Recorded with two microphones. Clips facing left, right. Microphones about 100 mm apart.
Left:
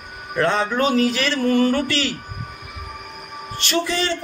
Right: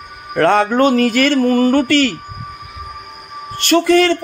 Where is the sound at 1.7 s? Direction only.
55° right (ahead or behind).